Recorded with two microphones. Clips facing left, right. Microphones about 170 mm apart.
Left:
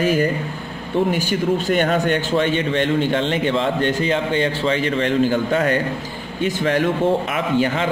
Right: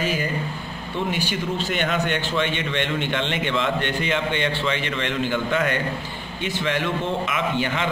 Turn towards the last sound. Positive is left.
turn(degrees=40)  # may be behind; listen again after turning